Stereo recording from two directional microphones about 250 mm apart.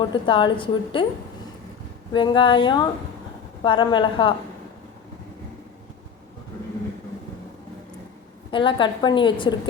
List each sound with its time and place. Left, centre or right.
0.0 s a woman's voice: centre
2.1 s a woman's voice: centre
8.4 s a woman's voice: centre